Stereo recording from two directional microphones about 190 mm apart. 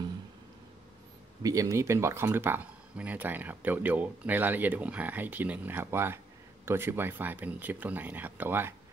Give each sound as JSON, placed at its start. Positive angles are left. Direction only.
{"t": 1.4, "sound": "speech", "side_deg": -15}